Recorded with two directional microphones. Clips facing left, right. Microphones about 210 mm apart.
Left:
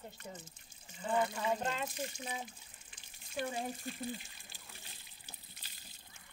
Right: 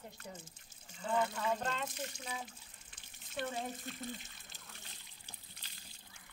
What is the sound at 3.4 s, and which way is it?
Speech, 10° left (ahead or behind).